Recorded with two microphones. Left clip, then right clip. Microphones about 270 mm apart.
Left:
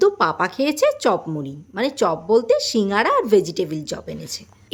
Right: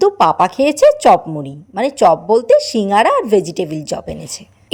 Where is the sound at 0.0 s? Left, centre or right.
Centre.